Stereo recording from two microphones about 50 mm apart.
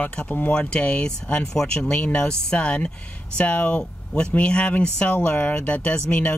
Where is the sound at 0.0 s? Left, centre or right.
Left.